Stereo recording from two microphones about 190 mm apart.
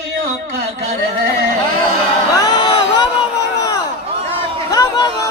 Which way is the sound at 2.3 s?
20° left (ahead or behind).